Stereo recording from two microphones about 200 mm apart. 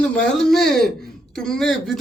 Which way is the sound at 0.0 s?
5° left (ahead or behind).